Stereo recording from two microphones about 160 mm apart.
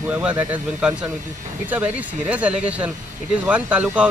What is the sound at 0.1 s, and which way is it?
A man's voice, 10° right (ahead or behind).